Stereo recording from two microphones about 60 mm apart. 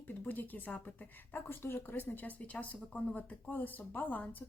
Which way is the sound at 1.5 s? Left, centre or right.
Left.